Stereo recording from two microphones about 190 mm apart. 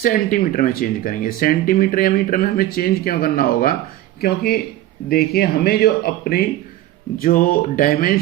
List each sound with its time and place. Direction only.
0.0 s speech: 45° left (ahead or behind)